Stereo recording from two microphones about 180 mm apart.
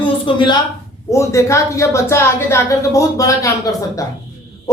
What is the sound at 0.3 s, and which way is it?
A woman's voice, 25° left (ahead or behind).